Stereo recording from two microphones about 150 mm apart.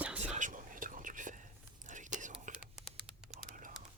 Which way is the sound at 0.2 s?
55° right (ahead or behind).